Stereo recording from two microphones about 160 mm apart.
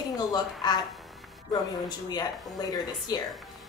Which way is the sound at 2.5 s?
25° left (ahead or behind).